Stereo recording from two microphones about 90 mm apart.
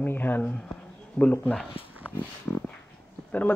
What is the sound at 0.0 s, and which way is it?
Speech, 20° left (ahead or behind).